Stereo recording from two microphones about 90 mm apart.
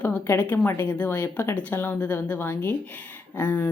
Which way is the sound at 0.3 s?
20° left (ahead or behind).